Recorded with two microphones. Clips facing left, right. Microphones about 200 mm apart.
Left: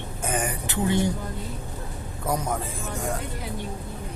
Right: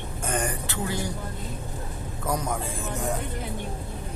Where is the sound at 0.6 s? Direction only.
20° left (ahead or behind).